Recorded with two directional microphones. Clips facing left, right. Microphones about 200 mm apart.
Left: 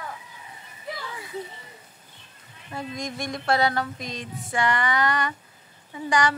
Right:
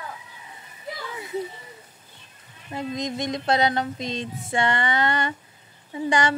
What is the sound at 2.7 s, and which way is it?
Speech, 20° right (ahead or behind).